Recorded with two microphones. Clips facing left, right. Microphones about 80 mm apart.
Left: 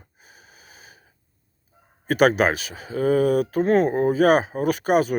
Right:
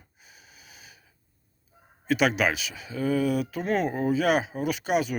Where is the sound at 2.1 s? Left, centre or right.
Left.